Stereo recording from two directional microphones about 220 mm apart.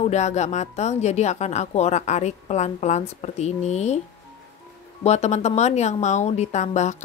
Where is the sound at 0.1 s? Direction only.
30° left (ahead or behind).